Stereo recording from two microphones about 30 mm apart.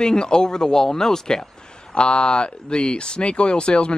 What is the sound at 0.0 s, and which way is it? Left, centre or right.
Speech, left.